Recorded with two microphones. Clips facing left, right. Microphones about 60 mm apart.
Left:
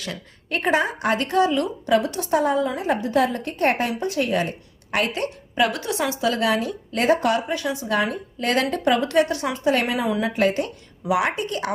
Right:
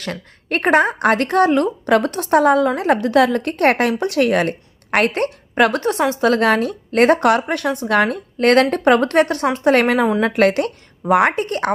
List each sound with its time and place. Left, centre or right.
0.0 s a woman's voice: right
11.0 s a woman's voice: right